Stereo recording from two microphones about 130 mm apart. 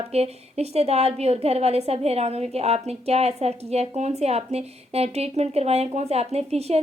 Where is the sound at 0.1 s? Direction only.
55° right (ahead or behind).